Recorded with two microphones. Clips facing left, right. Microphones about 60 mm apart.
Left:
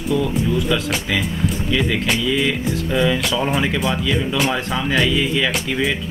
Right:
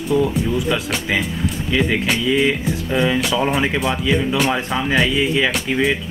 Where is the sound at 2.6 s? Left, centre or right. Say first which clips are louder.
Even; centre.